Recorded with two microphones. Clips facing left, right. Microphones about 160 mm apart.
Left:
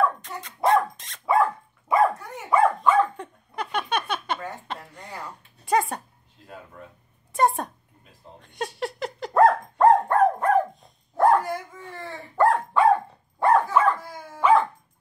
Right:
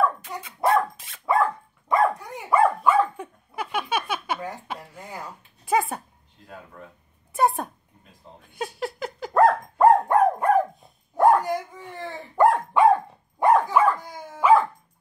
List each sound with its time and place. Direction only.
0.3 s dog: 10° right (ahead or behind)
5.7 s a sound: 5° right (ahead or behind)
8.4 s dog: centre (ahead or behind)
10.0 s dog: 10° right (ahead or behind)